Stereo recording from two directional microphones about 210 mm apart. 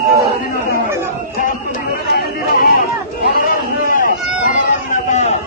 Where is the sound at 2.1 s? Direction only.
45° left (ahead or behind).